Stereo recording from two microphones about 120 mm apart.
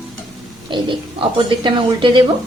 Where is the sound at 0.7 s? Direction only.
40° right (ahead or behind).